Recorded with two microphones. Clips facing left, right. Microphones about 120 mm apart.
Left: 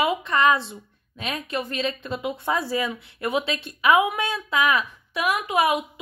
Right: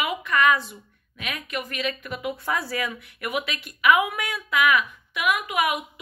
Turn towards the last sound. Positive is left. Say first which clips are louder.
# left 4 dB
turn(degrees=30)  # may be behind; listen again after turning